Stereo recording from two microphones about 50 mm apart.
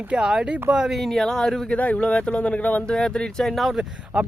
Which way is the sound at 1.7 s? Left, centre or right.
Left.